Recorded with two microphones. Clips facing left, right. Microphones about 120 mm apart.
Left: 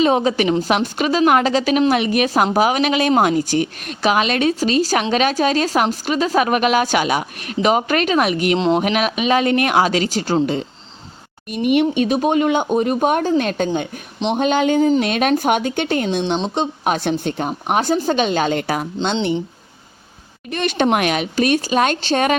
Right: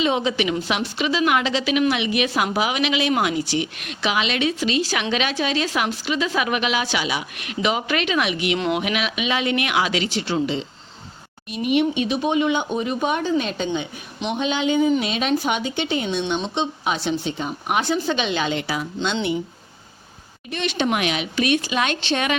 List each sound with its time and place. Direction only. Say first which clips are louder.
0.0 s a woman's voice: left 5 dB; 45° left (ahead or behind)
15.0 s a woman's voice: left 5 dB; 55° left (ahead or behind)
16.0 s a woman's voice: left 4 dB; 35° left (ahead or behind)
18.9 s speech: left 3 dB; 35° left (ahead or behind)
20.5 s a woman's voice: left 5 dB; 45° left (ahead or behind)